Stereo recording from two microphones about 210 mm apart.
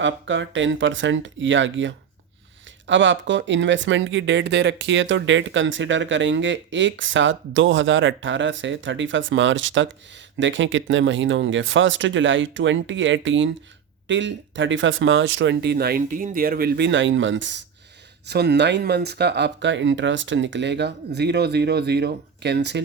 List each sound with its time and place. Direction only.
0.0 s speech: 60° right (ahead or behind)